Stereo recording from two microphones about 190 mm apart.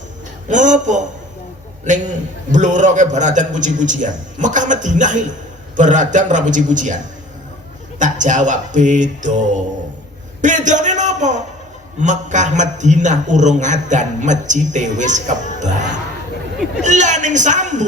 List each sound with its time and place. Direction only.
0.4 s a man's voice: 40° right (ahead or behind)